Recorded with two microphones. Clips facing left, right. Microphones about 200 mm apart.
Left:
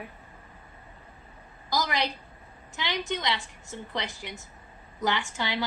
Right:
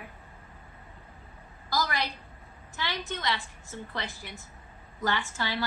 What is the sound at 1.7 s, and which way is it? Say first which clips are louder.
A woman's voice: left 2 dB; 20° left (ahead or behind).